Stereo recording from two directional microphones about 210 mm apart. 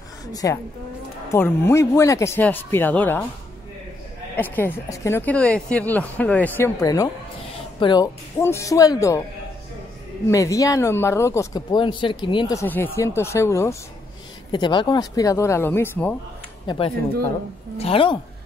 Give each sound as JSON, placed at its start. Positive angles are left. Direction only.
{"t": 0.3, "sound": "speech", "side_deg": 15}
{"t": 4.4, "sound": "speech", "side_deg": 10}
{"t": 10.2, "sound": "speech", "side_deg": 15}
{"t": 16.6, "sound": "a woman's voice", "side_deg": 25}